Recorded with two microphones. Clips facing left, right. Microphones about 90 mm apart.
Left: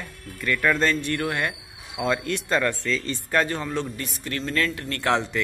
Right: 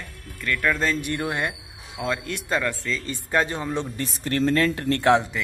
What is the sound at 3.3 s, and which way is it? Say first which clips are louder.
Speech: even; 20° right (ahead or behind).